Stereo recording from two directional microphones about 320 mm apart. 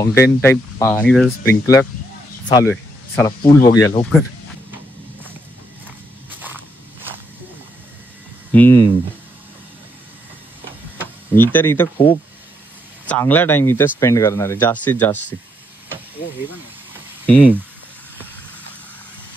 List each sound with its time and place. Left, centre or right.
0.0 s speech: centre
2.4 s a sound: centre
3.7 s speech: centre
8.5 s speech: centre
11.3 s speech: centre
17.3 s speech: centre